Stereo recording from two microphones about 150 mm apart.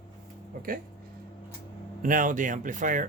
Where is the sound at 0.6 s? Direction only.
70° right (ahead or behind).